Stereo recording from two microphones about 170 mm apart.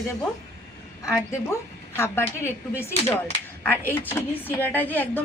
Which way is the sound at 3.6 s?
10° left (ahead or behind).